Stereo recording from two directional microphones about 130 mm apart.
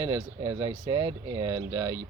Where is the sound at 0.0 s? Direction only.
20° right (ahead or behind).